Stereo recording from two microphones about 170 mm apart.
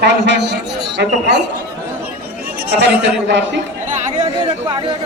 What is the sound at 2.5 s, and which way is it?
Speech, 65° right (ahead or behind).